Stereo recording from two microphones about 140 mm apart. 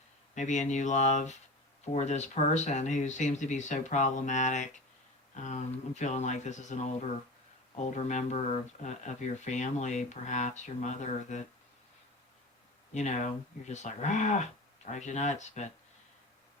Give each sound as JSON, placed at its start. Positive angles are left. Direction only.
{"t": 0.3, "sound": "speech", "side_deg": 60}
{"t": 12.9, "sound": "speech", "side_deg": 55}